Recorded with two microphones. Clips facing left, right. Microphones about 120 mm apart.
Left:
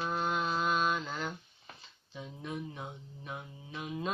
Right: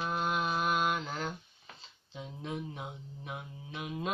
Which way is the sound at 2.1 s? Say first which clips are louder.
Right 1 dB; 20° right (ahead or behind).